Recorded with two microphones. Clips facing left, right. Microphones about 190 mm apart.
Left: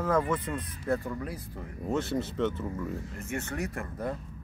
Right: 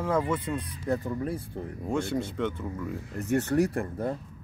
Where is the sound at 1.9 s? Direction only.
5° left (ahead or behind).